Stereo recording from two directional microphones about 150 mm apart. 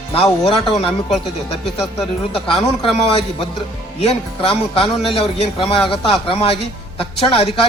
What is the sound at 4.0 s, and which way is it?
Speech, 40° left (ahead or behind).